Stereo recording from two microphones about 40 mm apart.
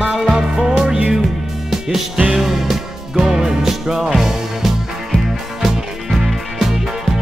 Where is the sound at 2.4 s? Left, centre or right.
Centre.